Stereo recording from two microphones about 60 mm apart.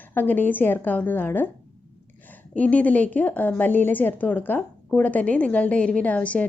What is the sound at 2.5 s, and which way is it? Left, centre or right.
A woman's voice, left.